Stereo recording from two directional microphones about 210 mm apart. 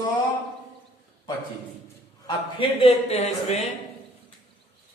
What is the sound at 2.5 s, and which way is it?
A man's voice, 30° left (ahead or behind).